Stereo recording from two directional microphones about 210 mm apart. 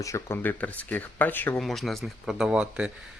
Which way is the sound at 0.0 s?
15° left (ahead or behind).